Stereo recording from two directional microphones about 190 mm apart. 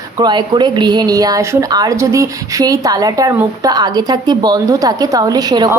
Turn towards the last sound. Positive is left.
turn(degrees=-20)  # may be behind; listen again after turning